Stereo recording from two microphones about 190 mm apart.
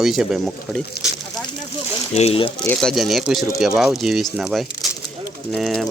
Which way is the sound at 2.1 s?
30° left (ahead or behind).